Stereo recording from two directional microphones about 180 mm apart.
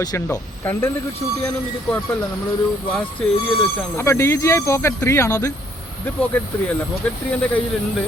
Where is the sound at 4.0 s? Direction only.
15° left (ahead or behind).